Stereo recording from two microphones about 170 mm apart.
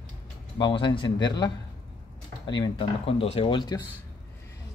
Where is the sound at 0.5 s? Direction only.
30° left (ahead or behind).